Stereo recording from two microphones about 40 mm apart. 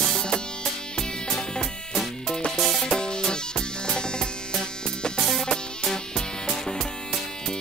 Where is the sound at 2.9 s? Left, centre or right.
Left.